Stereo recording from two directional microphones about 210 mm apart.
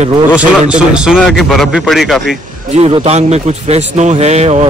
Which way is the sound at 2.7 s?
30° right (ahead or behind).